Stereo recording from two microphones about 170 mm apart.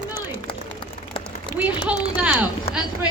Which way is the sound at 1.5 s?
10° right (ahead or behind).